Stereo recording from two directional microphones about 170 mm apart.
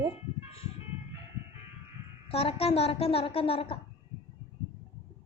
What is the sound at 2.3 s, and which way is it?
A child's voice, 35° left (ahead or behind).